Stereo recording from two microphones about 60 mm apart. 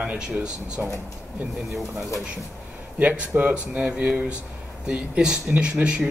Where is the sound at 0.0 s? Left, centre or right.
Centre.